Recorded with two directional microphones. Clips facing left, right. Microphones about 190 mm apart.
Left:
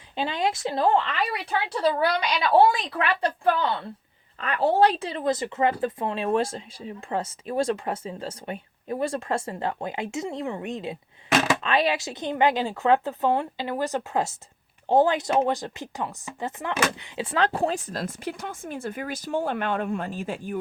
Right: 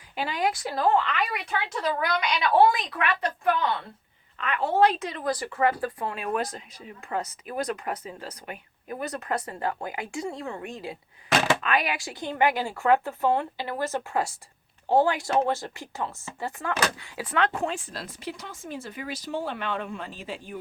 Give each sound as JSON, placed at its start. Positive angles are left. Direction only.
{"t": 0.2, "sound": "speech", "side_deg": 25}